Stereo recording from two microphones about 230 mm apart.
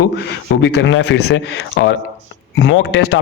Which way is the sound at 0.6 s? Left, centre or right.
Left.